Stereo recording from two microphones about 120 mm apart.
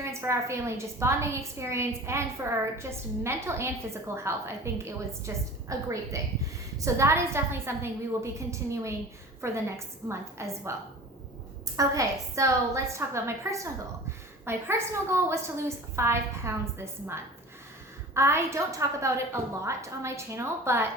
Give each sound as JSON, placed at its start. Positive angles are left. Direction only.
{"t": 0.0, "sound": "a woman's voice", "side_deg": -25}
{"t": 11.8, "sound": "a woman's voice", "side_deg": -25}